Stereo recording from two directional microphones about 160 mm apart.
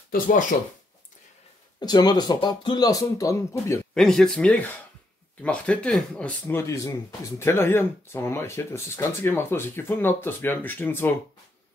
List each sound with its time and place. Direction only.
0.1 s speech: 55° left (ahead or behind)
1.8 s speech: 25° left (ahead or behind)
3.9 s speech: 5° left (ahead or behind)